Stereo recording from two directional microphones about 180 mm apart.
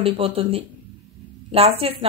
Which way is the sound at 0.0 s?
30° right (ahead or behind).